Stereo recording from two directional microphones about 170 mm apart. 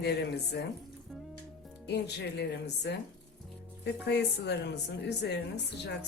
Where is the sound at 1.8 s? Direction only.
80° left.